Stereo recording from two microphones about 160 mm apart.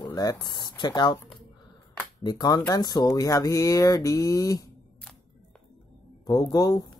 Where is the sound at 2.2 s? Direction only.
25° left (ahead or behind).